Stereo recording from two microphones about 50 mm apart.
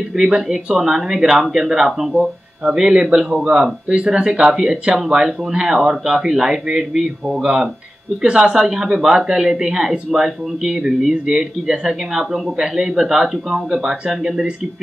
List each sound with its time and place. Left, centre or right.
0.1 s speech: centre